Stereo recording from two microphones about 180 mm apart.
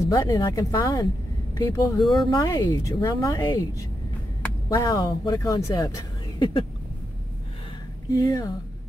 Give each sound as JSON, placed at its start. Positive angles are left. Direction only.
{"t": 0.0, "sound": "a woman's voice", "side_deg": 25}
{"t": 8.1, "sound": "a woman's voice", "side_deg": 20}